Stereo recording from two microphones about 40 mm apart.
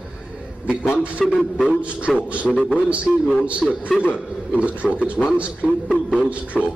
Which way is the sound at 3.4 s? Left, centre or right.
Right.